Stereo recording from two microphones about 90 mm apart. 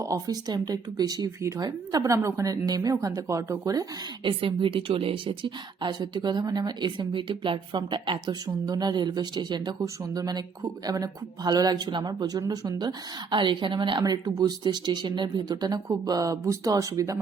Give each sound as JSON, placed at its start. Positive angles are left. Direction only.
{"t": 0.0, "sound": "speech", "side_deg": -40}
{"t": 1.4, "sound": "a woman's voice", "side_deg": -35}
{"t": 4.2, "sound": "speech", "side_deg": -80}
{"t": 8.4, "sound": "speech", "side_deg": -45}
{"t": 9.8, "sound": "speech", "side_deg": -40}
{"t": 13.3, "sound": "speech", "side_deg": -65}
{"t": 14.0, "sound": "speech", "side_deg": -45}